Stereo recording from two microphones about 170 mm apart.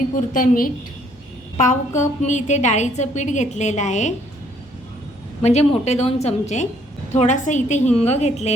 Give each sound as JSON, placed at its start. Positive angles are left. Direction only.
{"t": 0.3, "sound": "a woman's voice", "side_deg": 55}
{"t": 5.4, "sound": "a woman's voice", "side_deg": 40}